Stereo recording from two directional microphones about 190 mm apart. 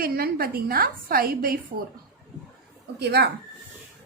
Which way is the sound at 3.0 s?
60° right (ahead or behind).